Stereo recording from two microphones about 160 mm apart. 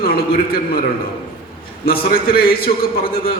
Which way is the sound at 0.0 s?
70° left (ahead or behind).